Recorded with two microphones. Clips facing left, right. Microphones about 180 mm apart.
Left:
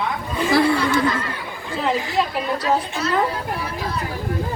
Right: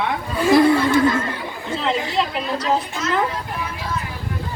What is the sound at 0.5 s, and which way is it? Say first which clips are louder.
Speech: right 4 dB; 20° right (ahead or behind).